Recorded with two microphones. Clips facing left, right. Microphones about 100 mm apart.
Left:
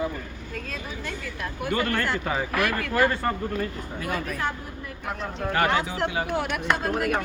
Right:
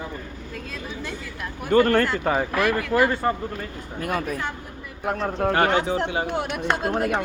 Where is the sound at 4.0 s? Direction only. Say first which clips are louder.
Right 4 dB; 55° right (ahead or behind).